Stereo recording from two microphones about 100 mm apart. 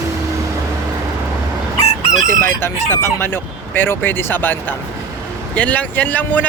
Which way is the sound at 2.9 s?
25° left (ahead or behind).